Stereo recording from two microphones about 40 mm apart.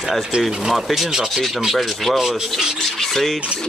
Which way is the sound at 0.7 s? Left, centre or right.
Centre.